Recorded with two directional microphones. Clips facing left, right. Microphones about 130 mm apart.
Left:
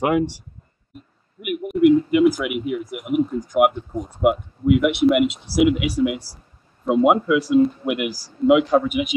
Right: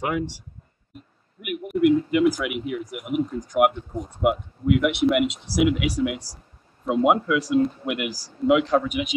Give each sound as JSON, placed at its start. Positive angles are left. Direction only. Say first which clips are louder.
{"t": 0.0, "sound": "speech", "louder": "left 7 dB", "side_deg": 60}
{"t": 1.4, "sound": "speech", "louder": "left 4 dB", "side_deg": 0}